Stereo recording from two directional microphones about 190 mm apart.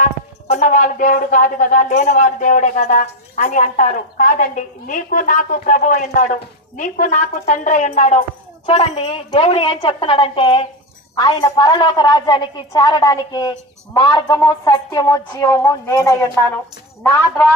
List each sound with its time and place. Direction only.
0.0 s a woman's voice: 35° left (ahead or behind); by 16.3 s 20° left (ahead or behind)
17.0 s a woman's voice: 5° left (ahead or behind)